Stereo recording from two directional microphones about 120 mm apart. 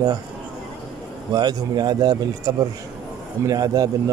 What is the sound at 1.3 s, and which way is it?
Speech, 35° right (ahead or behind).